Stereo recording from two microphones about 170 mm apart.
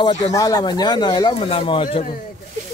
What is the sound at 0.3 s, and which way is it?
Speech, 20° left (ahead or behind).